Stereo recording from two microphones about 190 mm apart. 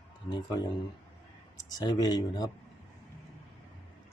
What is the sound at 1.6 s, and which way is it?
Speech, 20° left (ahead or behind).